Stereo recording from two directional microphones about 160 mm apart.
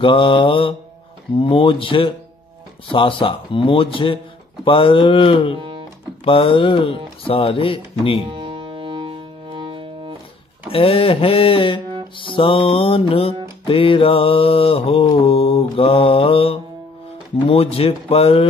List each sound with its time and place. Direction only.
0.0 s music: 35° left (ahead or behind)
5.6 s music: 35° right (ahead or behind)
6.2 s music: 35° left (ahead or behind)
8.3 s music: 35° right (ahead or behind)
10.7 s music: 35° left (ahead or behind)